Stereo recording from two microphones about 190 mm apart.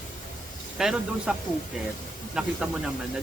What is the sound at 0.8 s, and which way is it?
Speech, 5° right (ahead or behind).